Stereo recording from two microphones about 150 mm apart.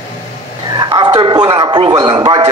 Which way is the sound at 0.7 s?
30° right (ahead or behind).